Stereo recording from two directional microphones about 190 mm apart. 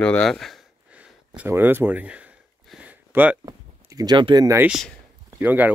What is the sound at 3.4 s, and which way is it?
Speech, 20° right (ahead or behind).